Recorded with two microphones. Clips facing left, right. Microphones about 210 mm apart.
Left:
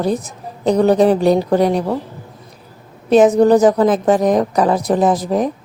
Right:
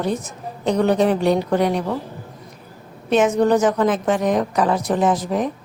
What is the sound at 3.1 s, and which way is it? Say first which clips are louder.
A woman's voice: left 6 dB; 35° left (ahead or behind).